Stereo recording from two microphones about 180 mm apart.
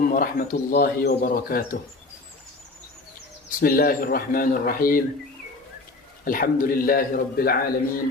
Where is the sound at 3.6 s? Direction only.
55° left (ahead or behind).